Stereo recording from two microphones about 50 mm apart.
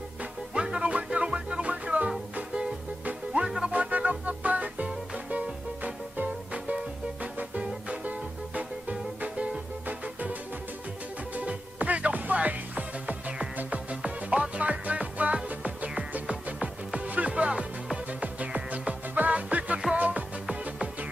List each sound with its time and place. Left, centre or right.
0.2 s music: centre
3.6 s music: right
11.3 s music: right